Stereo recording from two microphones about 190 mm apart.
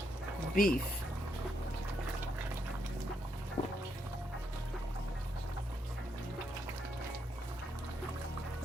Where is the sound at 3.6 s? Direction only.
35° left (ahead or behind).